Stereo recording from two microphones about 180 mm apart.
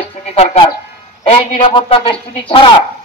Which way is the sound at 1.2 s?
30° left (ahead or behind).